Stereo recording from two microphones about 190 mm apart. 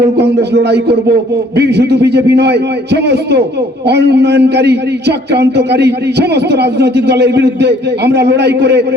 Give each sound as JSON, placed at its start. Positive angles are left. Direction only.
{"t": 0.2, "sound": "a man's voice", "side_deg": -60}